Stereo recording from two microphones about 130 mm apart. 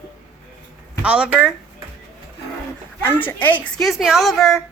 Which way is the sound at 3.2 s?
15° left (ahead or behind).